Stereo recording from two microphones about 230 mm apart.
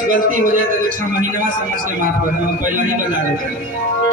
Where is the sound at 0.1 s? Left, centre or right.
Right.